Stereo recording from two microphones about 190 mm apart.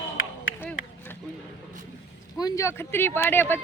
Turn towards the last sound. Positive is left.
turn(degrees=10)  # may be behind; listen again after turning